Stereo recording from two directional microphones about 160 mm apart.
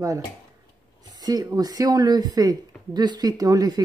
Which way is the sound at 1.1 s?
25° right (ahead or behind).